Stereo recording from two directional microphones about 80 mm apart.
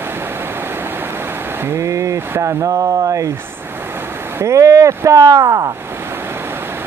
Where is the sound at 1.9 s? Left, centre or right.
Right.